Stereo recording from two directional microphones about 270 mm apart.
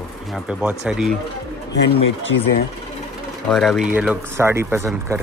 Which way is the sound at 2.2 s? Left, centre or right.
Left.